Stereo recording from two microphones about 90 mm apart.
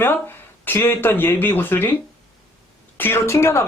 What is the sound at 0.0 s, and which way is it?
Speech, 25° left (ahead or behind).